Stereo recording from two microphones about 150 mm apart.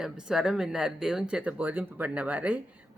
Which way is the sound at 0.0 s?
5° right (ahead or behind).